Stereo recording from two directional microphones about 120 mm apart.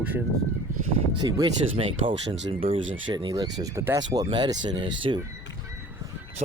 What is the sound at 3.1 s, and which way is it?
Speech, 35° right (ahead or behind).